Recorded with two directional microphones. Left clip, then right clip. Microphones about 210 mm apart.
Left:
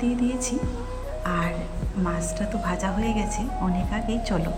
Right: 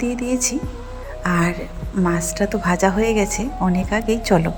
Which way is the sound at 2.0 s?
25° right (ahead or behind).